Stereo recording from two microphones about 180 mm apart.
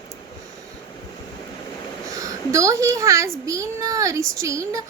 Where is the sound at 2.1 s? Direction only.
20° right (ahead or behind).